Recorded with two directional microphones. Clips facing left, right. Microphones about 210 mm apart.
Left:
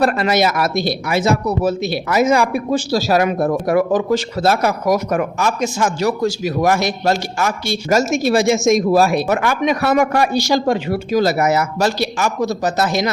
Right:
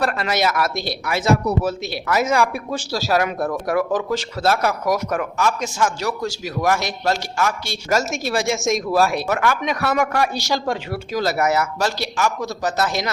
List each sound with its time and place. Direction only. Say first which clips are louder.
0.0 s speech: left 5 dB; 20° left (ahead or behind)
0.7 s speech: left 7 dB; centre (ahead or behind)
1.0 s speech: right 1 dB; 20° left (ahead or behind)